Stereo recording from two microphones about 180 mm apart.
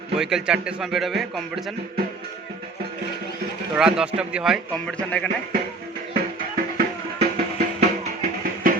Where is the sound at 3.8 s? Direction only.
5° right (ahead or behind).